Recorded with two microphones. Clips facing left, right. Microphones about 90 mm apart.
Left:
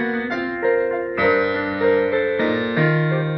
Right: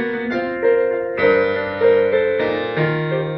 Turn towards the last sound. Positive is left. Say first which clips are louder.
# even
turn(degrees=5)  # may be behind; listen again after turning